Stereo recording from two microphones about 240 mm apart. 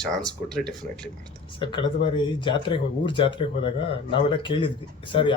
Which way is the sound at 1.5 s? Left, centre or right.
Centre.